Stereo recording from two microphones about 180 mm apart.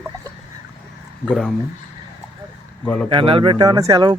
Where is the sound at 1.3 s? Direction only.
Centre (ahead or behind).